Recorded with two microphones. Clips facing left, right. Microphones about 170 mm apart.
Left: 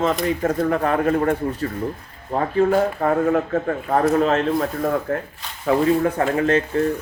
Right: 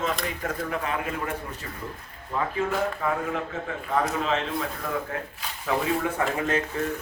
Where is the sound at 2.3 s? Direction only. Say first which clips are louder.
Left 9 dB; 45° left (ahead or behind).